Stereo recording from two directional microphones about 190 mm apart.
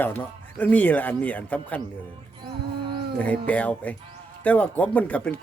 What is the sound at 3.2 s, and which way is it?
Speech, 10° left (ahead or behind).